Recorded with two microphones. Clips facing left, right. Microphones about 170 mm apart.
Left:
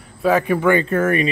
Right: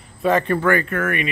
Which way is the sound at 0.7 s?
25° left (ahead or behind).